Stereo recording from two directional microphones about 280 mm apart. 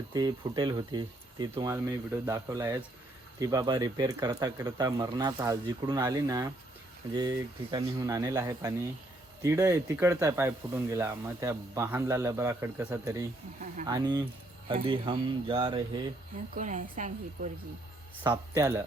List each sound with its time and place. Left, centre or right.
0.1 s a woman's voice: centre
18.2 s speech: centre